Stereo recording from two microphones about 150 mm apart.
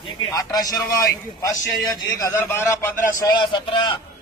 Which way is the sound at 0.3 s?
25° left (ahead or behind).